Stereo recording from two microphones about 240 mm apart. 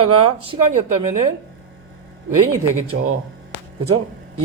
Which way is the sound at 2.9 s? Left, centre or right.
Right.